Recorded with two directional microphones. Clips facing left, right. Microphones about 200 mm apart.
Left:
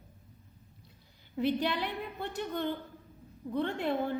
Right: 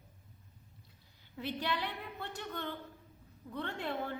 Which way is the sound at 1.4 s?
15° left (ahead or behind).